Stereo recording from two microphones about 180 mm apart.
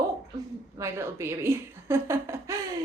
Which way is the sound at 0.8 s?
15° right (ahead or behind).